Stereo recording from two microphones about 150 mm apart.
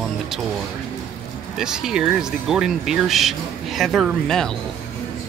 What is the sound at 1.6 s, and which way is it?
Speech, 5° right (ahead or behind).